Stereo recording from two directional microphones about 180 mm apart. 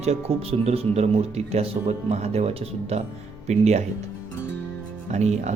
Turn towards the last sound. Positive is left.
turn(degrees=-40)  # may be behind; listen again after turning